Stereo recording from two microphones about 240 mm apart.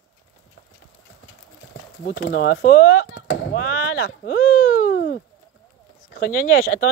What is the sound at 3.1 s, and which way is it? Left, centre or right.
Speech, left.